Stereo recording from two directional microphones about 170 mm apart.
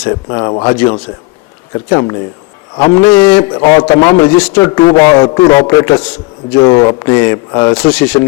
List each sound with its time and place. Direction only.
0.1 s a man's voice: 25° left (ahead or behind)